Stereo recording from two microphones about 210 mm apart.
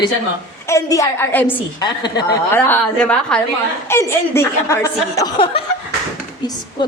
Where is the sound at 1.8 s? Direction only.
20° left (ahead or behind).